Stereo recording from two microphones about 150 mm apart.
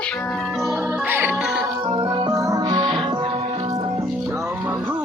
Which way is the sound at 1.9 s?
30° right (ahead or behind).